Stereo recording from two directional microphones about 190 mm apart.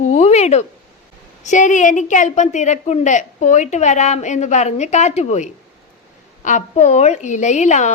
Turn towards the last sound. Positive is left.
turn(degrees=40)  # may be behind; listen again after turning